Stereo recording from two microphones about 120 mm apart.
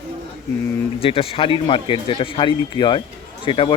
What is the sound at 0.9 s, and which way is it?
A man's voice, 50° left (ahead or behind).